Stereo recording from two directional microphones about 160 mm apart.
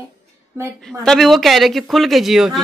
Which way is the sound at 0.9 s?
Centre (ahead or behind).